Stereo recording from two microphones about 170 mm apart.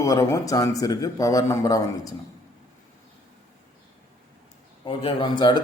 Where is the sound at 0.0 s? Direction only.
20° left (ahead or behind).